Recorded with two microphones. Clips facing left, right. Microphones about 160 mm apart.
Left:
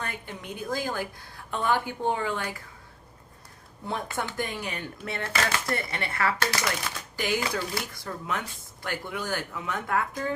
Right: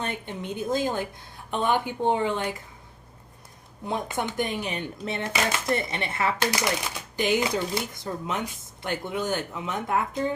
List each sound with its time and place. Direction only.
0.0 s speech: 20° right (ahead or behind)
3.8 s speech: 20° right (ahead or behind)